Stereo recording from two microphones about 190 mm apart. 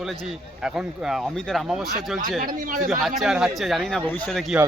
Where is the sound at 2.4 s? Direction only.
45° right (ahead or behind).